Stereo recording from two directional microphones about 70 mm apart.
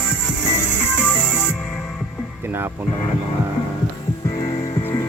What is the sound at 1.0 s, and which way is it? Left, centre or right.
Music, left.